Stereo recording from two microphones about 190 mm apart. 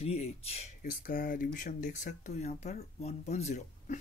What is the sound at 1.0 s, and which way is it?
Speech, 45° left (ahead or behind).